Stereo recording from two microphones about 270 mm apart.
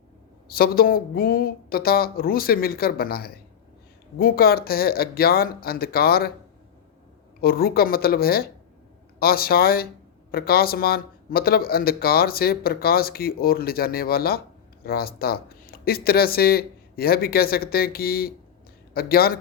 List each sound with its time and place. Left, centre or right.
0.4 s speech: left
7.4 s speech: left